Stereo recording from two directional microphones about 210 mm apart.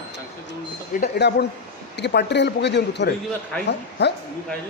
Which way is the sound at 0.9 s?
50° left (ahead or behind).